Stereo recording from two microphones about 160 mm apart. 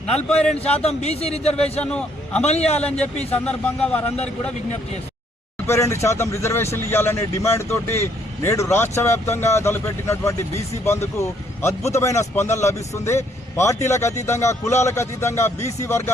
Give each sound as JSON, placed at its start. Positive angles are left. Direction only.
{"t": 0.6, "sound": "speech", "side_deg": 40}
{"t": 1.8, "sound": "speech", "side_deg": 5}
{"t": 2.5, "sound": "speech", "side_deg": 40}
{"t": 2.8, "sound": "speech", "side_deg": 5}
{"t": 5.6, "sound": "speech", "side_deg": 15}